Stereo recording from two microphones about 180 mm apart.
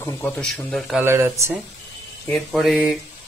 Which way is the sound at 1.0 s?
15° right (ahead or behind).